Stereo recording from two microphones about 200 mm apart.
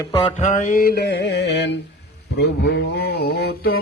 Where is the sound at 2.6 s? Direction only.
55° left (ahead or behind).